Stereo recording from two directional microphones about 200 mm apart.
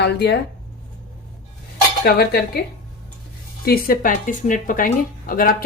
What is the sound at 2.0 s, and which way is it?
Speech, 50° left (ahead or behind).